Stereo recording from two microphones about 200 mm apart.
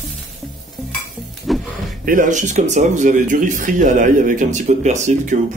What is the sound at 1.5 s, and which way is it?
Music, centre (ahead or behind).